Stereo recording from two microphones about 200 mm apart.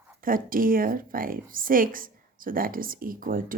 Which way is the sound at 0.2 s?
45° right (ahead or behind).